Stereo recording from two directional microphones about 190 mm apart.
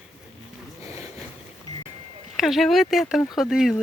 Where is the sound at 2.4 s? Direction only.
Centre (ahead or behind).